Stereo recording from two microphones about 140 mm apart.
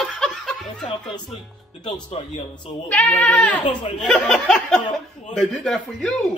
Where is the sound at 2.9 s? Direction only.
10° left (ahead or behind).